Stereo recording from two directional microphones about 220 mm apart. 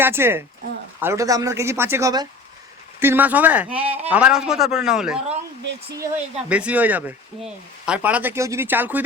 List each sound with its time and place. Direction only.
0.0 s speech: 10° right (ahead or behind)
3.7 s speech: 25° right (ahead or behind)
4.1 s a man's voice: 5° right (ahead or behind)
6.5 s speech: 5° right (ahead or behind)